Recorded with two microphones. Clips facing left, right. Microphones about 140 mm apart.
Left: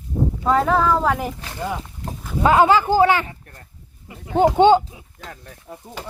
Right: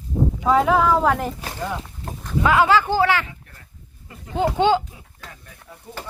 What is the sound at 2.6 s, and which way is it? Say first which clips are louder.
Speech: left 3 dB; 15° left (ahead or behind).